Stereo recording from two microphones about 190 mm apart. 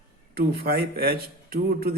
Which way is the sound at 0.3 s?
55° right (ahead or behind).